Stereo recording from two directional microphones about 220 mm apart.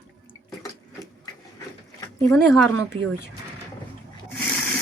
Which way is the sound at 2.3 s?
5° left (ahead or behind).